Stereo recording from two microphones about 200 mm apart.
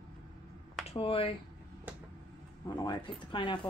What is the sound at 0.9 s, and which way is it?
Speech, 25° left (ahead or behind).